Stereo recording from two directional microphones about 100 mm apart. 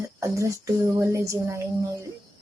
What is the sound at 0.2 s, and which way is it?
A woman's voice, 30° right (ahead or behind).